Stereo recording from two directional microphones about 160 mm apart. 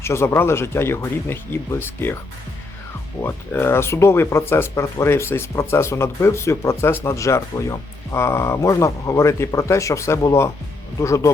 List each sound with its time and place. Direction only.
0.0 s speech: 15° left (ahead or behind)
3.2 s speech: 15° left (ahead or behind)